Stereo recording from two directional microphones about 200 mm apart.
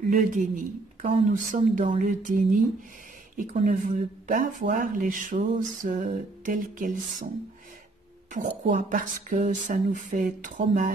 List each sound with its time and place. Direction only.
0.1 s speech: 40° right (ahead or behind)
8.3 s speech: 40° right (ahead or behind)